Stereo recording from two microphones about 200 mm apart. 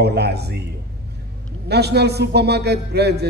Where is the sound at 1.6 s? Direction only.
55° right (ahead or behind).